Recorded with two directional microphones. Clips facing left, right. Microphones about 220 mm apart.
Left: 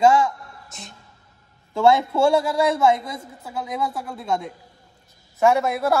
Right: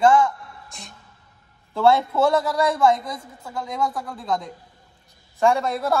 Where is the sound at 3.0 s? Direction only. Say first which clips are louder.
Even; 25° left (ahead or behind).